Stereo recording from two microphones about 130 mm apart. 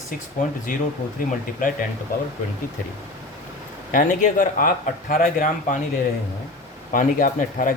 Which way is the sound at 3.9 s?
80° left.